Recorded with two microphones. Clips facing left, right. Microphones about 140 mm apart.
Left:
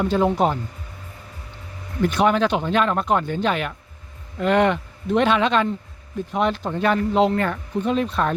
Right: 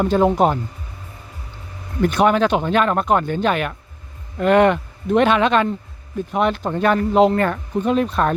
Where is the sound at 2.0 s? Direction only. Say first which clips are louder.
Right 3 dB; 50° right (ahead or behind).